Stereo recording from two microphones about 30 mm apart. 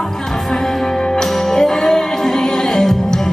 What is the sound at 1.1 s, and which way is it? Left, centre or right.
Music, centre.